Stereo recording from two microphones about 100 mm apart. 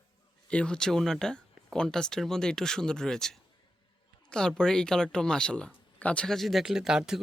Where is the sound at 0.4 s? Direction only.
10° left (ahead or behind).